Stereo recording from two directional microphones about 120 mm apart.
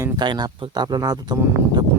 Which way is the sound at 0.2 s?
35° right (ahead or behind).